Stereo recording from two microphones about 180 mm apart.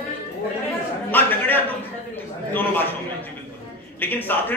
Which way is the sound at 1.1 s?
10° left (ahead or behind).